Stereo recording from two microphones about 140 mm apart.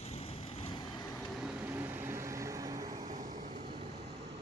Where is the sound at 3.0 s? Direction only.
70° right (ahead or behind).